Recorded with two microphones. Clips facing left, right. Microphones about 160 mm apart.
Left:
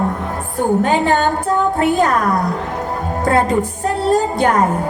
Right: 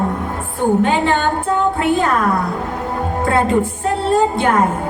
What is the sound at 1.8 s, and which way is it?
Speech, 40° left (ahead or behind).